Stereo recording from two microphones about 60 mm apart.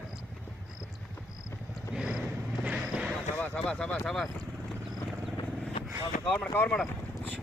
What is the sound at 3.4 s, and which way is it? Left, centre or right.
Speech, left.